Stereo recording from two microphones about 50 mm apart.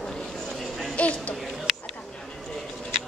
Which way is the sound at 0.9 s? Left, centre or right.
Left.